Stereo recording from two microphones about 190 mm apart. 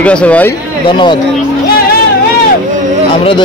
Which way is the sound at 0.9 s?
25° left (ahead or behind).